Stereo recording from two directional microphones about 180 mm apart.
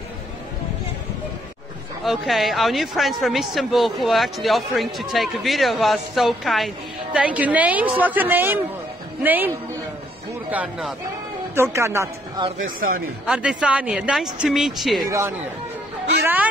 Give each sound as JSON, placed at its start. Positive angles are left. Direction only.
{"t": 2.0, "sound": "speech", "side_deg": 0}
{"t": 10.5, "sound": "speech", "side_deg": -10}
{"t": 13.3, "sound": "speech", "side_deg": -5}
{"t": 15.0, "sound": "speech", "side_deg": -15}